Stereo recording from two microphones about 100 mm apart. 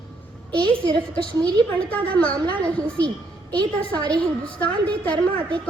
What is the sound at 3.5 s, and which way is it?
Speech, 50° right (ahead or behind).